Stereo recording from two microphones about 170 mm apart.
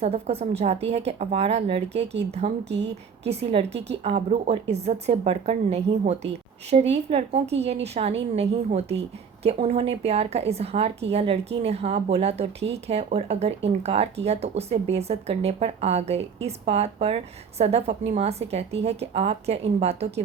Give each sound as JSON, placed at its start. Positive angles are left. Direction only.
{"t": 0.0, "sound": "a woman's voice", "side_deg": -40}